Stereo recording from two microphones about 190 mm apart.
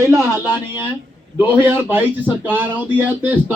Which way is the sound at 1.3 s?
10° right (ahead or behind).